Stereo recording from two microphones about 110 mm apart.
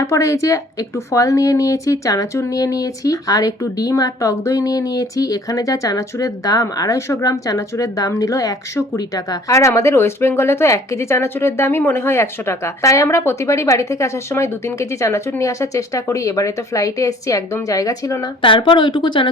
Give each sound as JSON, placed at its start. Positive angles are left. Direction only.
{"t": 0.0, "sound": "a woman's voice", "side_deg": 25}
{"t": 18.4, "sound": "speech", "side_deg": 55}